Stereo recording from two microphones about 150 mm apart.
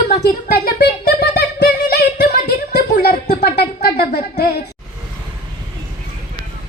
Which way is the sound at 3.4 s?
90° left.